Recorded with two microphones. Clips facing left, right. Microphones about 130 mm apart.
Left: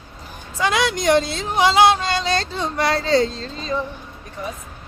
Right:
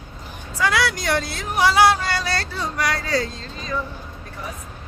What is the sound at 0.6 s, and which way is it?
Speech, 20° left (ahead or behind).